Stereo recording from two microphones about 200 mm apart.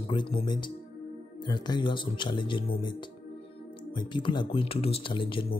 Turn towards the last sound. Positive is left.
turn(degrees=25)  # may be behind; listen again after turning